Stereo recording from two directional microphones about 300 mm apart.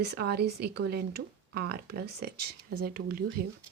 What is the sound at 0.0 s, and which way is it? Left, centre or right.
Speech, right.